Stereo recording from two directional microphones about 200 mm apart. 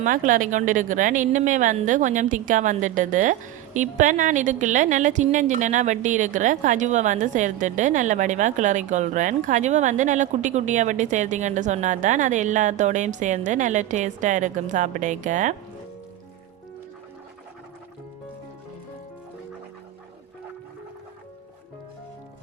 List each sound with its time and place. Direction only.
0.0 s a woman's voice: 40° right (ahead or behind)